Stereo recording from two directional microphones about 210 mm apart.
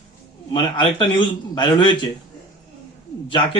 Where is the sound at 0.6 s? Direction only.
25° left (ahead or behind).